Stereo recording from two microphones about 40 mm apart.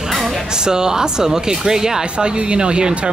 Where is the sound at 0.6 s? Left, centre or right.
Centre.